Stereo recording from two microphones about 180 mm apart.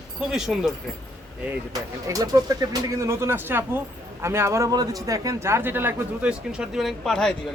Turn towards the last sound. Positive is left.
turn(degrees=5)  # may be behind; listen again after turning